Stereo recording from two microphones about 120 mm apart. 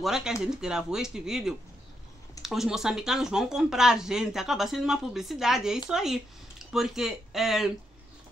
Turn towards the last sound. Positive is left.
turn(degrees=-5)  # may be behind; listen again after turning